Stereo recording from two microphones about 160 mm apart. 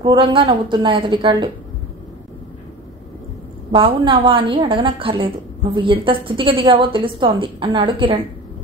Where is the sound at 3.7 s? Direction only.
30° right (ahead or behind).